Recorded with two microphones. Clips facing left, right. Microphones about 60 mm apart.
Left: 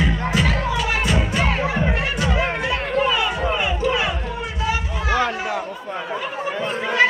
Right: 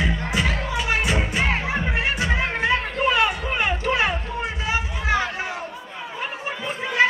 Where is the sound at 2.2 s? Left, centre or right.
Right.